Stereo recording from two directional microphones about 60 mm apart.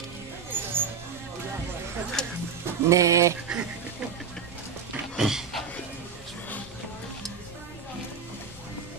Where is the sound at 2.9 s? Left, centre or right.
Right.